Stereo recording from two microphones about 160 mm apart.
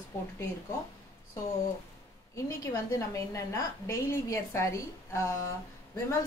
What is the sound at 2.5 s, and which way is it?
A woman's voice, 20° left (ahead or behind).